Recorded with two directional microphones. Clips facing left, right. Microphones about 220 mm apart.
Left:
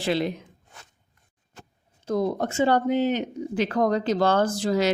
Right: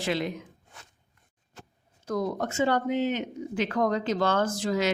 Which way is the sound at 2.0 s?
30° left (ahead or behind).